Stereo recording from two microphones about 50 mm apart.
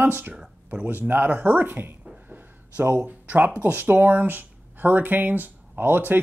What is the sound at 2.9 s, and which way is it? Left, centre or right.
Speech, right.